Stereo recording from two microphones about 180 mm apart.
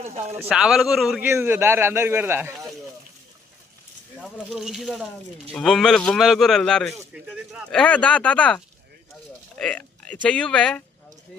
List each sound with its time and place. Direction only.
0.0 s speech: 40° right (ahead or behind)
0.4 s speech: 5° right (ahead or behind)
1.2 s a man's voice: 10° right (ahead or behind)
4.2 s speech: centre (ahead or behind)
7.7 s speech: 5° left (ahead or behind)
9.6 s a sound: 5° left (ahead or behind)
10.2 s speech: 5° left (ahead or behind)